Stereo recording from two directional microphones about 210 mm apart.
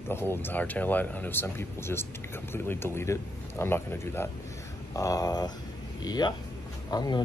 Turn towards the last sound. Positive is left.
turn(degrees=20)  # may be behind; listen again after turning